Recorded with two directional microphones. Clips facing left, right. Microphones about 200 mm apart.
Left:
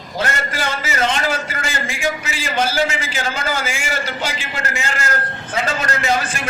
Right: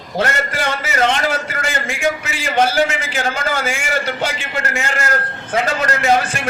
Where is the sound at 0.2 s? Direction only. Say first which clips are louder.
Right 3 dB; 55° right (ahead or behind).